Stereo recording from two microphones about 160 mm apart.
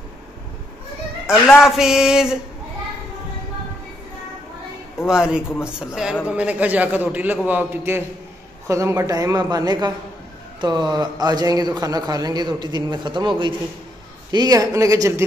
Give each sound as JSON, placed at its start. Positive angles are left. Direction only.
{"t": 1.6, "sound": "speech", "side_deg": -5}
{"t": 5.0, "sound": "a man's voice", "side_deg": -5}
{"t": 14.3, "sound": "a man's voice", "side_deg": -25}